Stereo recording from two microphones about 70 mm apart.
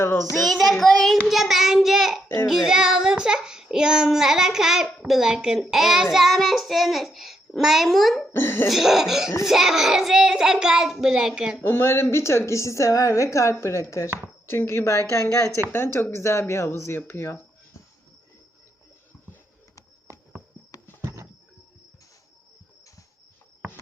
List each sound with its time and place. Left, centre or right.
0.3 s child singing: centre
8.4 s speech: left
8.7 s child singing: centre
11.6 s a woman's voice: left